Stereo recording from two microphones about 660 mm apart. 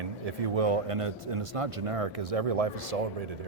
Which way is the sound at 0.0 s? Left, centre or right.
Right.